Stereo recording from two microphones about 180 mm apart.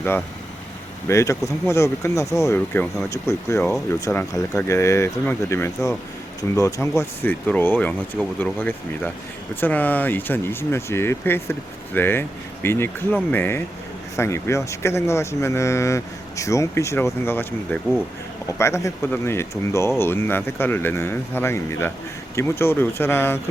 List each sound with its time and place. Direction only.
1.0 s speech: 15° left (ahead or behind)